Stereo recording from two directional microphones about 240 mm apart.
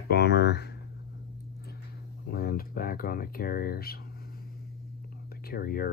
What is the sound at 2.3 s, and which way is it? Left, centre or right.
Speech, left.